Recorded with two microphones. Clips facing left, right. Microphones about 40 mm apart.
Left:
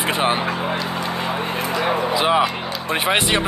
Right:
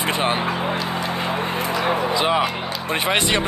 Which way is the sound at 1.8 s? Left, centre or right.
Centre.